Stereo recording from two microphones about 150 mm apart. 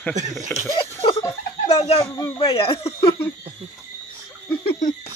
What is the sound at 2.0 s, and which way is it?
Speech, 25° left (ahead or behind).